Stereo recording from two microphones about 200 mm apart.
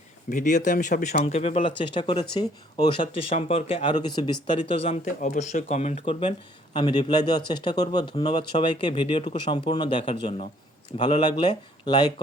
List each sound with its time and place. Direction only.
0.3 s speech: 35° left (ahead or behind)
5.0 s speech: 40° left (ahead or behind); by 12.1 s 20° left (ahead or behind)